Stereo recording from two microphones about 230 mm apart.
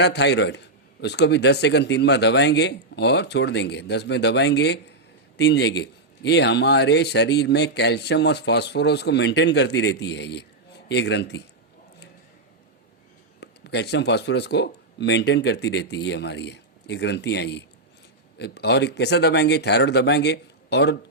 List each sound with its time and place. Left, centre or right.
0.0 s a man's voice: left
13.4 s a man's voice: left